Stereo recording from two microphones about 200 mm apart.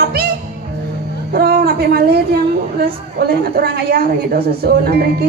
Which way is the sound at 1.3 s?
50° right (ahead or behind).